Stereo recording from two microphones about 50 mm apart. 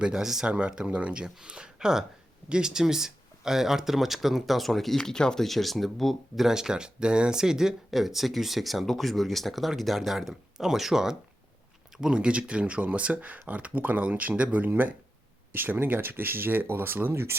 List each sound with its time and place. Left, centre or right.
0.0 s speech: centre; by 14.7 s right
15.5 s speech: right